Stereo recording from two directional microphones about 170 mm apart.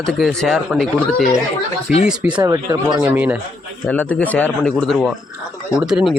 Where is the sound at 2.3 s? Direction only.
20° right (ahead or behind).